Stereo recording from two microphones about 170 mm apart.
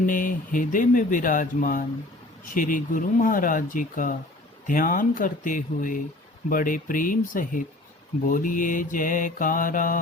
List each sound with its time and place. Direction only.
0.0 s speech: 50° left (ahead or behind)